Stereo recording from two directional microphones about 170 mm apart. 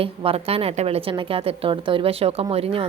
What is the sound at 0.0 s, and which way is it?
A woman's voice, 35° right (ahead or behind).